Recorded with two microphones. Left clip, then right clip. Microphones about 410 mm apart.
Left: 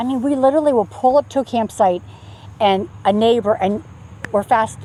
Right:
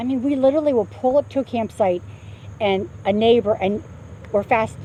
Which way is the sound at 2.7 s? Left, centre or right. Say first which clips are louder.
Left 3 dB; left.